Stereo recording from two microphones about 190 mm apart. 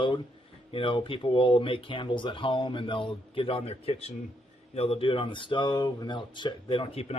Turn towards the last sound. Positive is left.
turn(degrees=30)  # may be behind; listen again after turning